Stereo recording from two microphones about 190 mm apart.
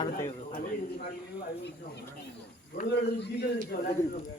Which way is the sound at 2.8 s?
45° left (ahead or behind).